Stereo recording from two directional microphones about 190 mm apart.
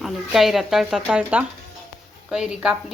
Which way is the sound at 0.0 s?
Centre (ahead or behind).